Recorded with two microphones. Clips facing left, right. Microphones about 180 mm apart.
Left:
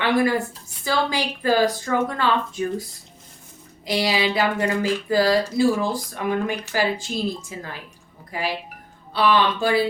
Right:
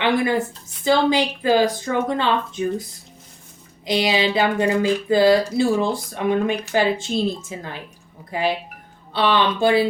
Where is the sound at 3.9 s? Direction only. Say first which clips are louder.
Right 2 dB; 20° right (ahead or behind).